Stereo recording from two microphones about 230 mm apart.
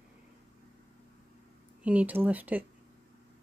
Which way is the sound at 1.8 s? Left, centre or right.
Centre.